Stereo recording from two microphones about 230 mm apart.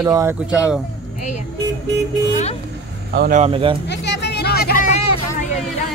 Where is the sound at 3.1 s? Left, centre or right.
Right.